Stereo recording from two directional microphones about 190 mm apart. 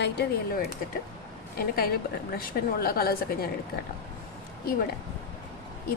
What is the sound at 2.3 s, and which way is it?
A woman's voice, 50° left (ahead or behind).